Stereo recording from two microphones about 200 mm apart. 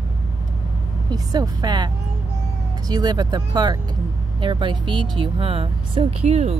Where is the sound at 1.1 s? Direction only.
20° right (ahead or behind).